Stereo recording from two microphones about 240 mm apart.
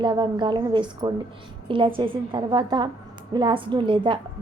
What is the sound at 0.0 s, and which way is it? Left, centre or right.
A woman's voice, centre.